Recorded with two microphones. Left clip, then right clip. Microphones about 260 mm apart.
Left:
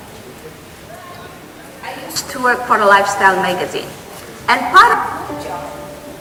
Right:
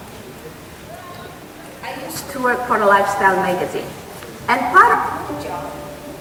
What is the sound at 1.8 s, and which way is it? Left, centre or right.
A woman's voice, centre.